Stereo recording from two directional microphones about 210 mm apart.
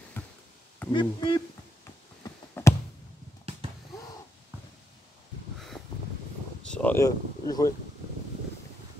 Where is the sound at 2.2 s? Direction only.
15° left (ahead or behind).